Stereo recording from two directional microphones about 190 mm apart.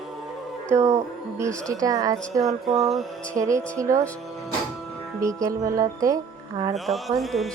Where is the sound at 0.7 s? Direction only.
15° right (ahead or behind).